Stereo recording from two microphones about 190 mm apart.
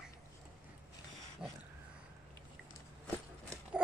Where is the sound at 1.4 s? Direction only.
5° right (ahead or behind).